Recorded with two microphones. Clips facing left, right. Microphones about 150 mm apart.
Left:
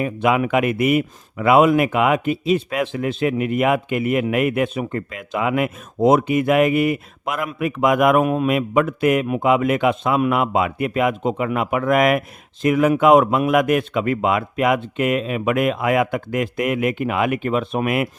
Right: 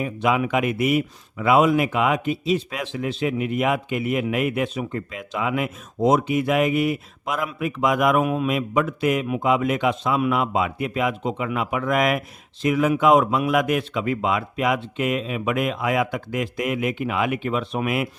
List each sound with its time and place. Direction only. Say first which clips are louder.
0.0 s speech: left 3 dB; 60° left (ahead or behind)